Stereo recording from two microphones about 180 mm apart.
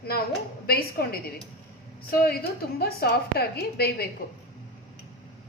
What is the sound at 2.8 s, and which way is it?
Speech, 60° left (ahead or behind).